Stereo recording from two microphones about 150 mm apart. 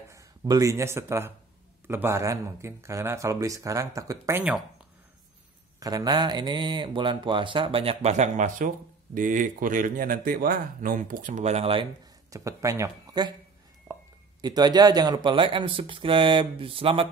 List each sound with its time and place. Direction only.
0.1 s speech: 20° right (ahead or behind)
5.8 s speech: 25° right (ahead or behind)
12.3 s speech: 20° right (ahead or behind)
13.9 s whispering: 15° right (ahead or behind)
14.4 s speech: 25° right (ahead or behind)